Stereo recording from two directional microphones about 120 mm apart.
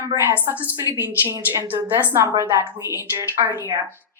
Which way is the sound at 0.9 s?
25° right (ahead or behind).